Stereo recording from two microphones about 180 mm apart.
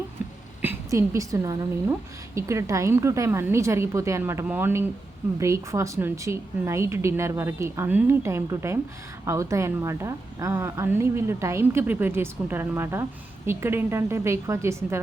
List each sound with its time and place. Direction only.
0.6 s a woman's voice: 15° right (ahead or behind)